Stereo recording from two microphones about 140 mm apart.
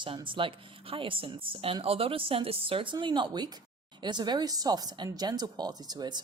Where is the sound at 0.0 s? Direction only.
35° right (ahead or behind).